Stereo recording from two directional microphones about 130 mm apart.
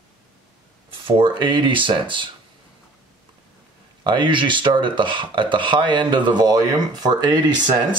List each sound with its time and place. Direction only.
1.0 s speech: 40° right (ahead or behind)
4.0 s speech: 35° right (ahead or behind)